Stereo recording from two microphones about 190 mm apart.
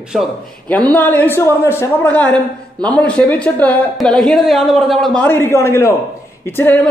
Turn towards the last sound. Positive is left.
turn(degrees=10)  # may be behind; listen again after turning